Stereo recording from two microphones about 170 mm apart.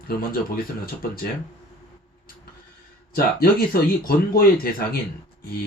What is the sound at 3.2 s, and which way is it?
Speech, 65° left (ahead or behind).